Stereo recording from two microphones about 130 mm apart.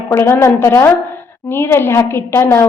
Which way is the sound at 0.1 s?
20° left (ahead or behind).